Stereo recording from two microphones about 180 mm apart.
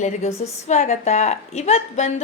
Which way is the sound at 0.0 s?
35° left (ahead or behind).